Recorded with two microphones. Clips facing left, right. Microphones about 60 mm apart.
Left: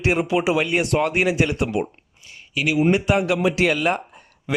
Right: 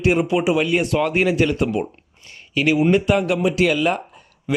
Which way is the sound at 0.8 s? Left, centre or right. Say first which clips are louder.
Right 1 dB; left.